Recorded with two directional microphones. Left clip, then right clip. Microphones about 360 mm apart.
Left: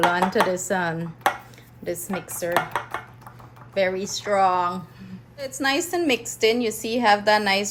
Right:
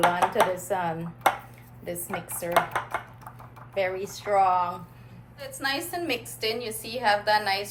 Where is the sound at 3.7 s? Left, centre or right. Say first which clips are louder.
Left 5 dB; left.